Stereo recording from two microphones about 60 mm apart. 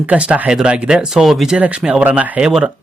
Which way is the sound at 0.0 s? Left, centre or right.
Right.